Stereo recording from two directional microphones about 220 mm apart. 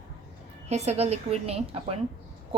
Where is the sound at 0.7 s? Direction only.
30° right (ahead or behind).